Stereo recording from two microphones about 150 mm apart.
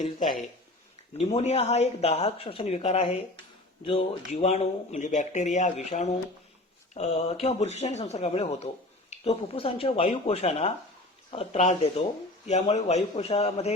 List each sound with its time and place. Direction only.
0.2 s speech: centre (ahead or behind)
1.2 s speech: 45° left (ahead or behind)
4.3 s speech: 45° left (ahead or behind)